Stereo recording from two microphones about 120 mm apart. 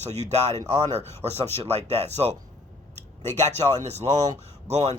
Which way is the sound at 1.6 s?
60° right (ahead or behind).